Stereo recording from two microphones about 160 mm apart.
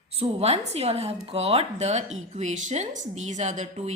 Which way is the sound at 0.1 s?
40° right (ahead or behind).